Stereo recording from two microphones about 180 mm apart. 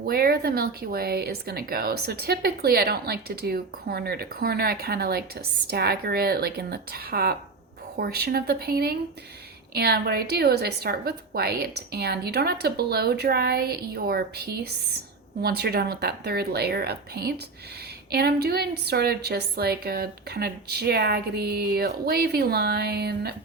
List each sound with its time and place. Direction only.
0.0 s speech: 60° right (ahead or behind)